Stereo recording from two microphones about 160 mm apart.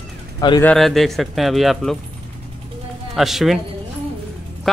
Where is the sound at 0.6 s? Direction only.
Centre (ahead or behind).